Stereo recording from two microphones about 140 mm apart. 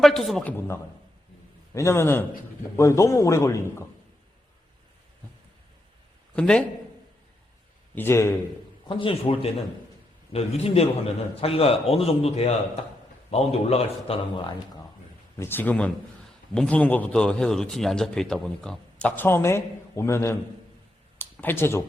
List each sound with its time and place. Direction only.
0.0 s speech: centre (ahead or behind)
1.7 s a man's voice: 20° left (ahead or behind)
6.3 s a man's voice: 5° left (ahead or behind)
7.9 s a man's voice: 15° left (ahead or behind)
8.9 s a man's voice: 40° left (ahead or behind)
15.4 s a man's voice: 15° left (ahead or behind)